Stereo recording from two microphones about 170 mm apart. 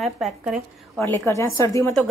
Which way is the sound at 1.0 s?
15° left (ahead or behind).